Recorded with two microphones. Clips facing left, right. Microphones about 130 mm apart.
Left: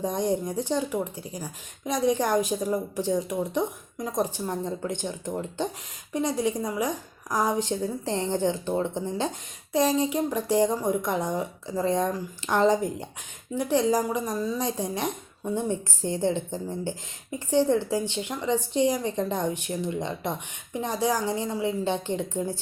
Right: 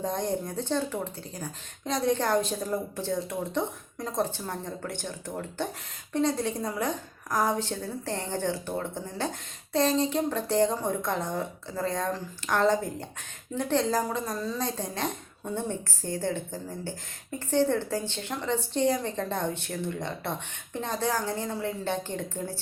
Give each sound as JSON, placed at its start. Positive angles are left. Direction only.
{"t": 0.0, "sound": "a woman's voice", "side_deg": 15}